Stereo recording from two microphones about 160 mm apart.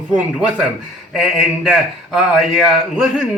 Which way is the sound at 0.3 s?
5° right (ahead or behind).